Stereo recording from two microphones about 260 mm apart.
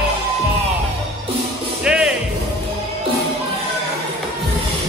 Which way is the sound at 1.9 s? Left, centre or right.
Centre.